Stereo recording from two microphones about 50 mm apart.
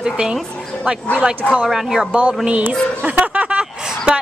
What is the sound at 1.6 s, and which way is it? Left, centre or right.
Speech, centre.